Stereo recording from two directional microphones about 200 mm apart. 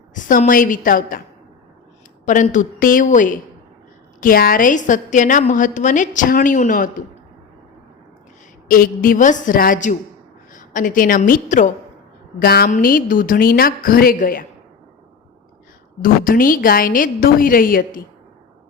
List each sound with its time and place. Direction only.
0.1 s a woman's voice: 40° left (ahead or behind)
2.2 s a woman's voice: 40° left (ahead or behind)
8.6 s a woman's voice: 45° left (ahead or behind)
12.4 s a woman's voice: 50° left (ahead or behind)
16.0 s a woman's voice: 45° left (ahead or behind)